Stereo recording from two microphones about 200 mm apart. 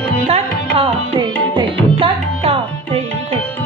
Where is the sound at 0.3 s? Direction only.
30° right (ahead or behind).